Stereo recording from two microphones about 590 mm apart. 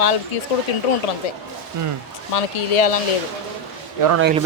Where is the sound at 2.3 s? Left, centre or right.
Left.